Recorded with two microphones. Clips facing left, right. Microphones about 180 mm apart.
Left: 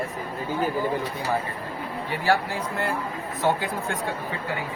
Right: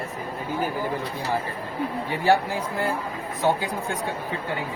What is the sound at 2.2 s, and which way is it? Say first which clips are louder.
Speech: right 3 dB; 20° right (ahead or behind).